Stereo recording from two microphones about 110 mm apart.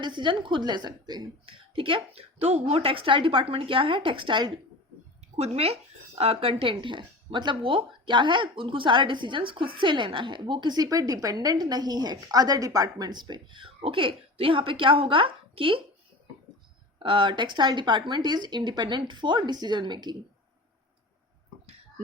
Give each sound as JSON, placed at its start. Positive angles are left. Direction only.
{"t": 0.0, "sound": "a woman's voice", "side_deg": -45}
{"t": 1.5, "sound": "speech", "side_deg": -55}
{"t": 2.1, "sound": "speech", "side_deg": -70}
{"t": 5.4, "sound": "speech", "side_deg": -65}
{"t": 17.0, "sound": "speech", "side_deg": -50}